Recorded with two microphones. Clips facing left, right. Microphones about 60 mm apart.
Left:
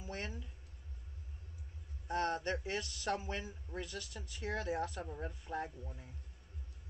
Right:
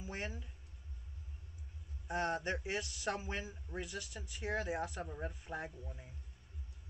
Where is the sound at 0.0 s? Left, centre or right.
Centre.